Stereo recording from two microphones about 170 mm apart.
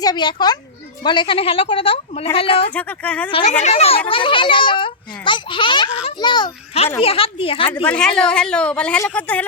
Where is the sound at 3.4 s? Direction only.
45° left (ahead or behind).